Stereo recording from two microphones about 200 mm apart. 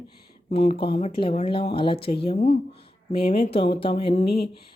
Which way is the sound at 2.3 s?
35° left (ahead or behind).